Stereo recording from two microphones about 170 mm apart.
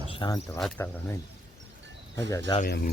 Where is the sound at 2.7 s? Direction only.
70° left (ahead or behind).